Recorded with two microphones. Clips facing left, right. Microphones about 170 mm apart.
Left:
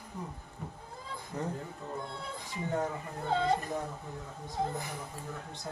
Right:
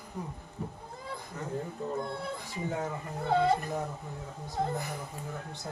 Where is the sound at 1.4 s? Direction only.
30° left (ahead or behind).